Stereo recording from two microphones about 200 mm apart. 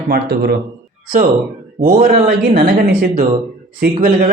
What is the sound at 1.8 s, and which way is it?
A man's voice, 35° right (ahead or behind).